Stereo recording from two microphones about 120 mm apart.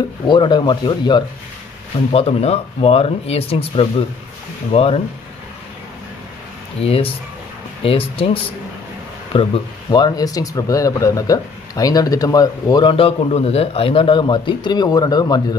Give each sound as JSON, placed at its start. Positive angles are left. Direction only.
{"t": 0.3, "sound": "speech", "side_deg": 40}
{"t": 2.1, "sound": "speech", "side_deg": 60}
{"t": 6.8, "sound": "speech", "side_deg": 50}
{"t": 9.8, "sound": "speech", "side_deg": 35}
{"t": 12.9, "sound": "speech", "side_deg": 55}